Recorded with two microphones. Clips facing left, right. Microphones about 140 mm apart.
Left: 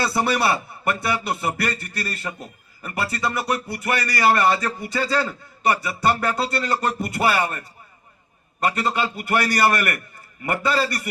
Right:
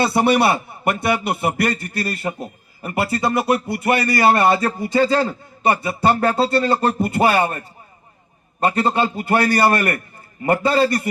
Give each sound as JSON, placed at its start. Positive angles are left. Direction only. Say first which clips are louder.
{"t": 0.0, "sound": "a man's voice", "louder": "right 5 dB", "side_deg": -25}
{"t": 8.6, "sound": "a man's voice", "louder": "right 4 dB", "side_deg": -35}